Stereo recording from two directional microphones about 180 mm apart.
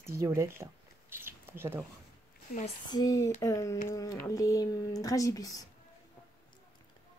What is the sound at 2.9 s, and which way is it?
Speech, 20° left (ahead or behind).